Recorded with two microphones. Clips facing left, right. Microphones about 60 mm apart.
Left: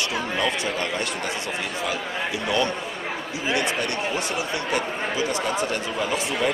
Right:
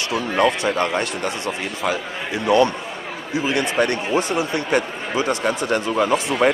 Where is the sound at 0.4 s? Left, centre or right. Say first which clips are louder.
Right 9 dB; right.